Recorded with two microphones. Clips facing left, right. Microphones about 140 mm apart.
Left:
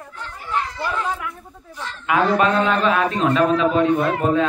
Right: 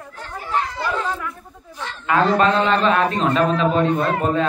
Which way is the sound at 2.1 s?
10° left (ahead or behind).